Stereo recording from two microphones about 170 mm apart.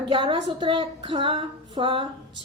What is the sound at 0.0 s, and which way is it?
A woman's voice, 30° right (ahead or behind).